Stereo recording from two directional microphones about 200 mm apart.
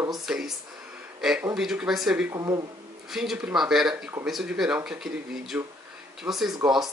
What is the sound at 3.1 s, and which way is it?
Speech, centre (ahead or behind).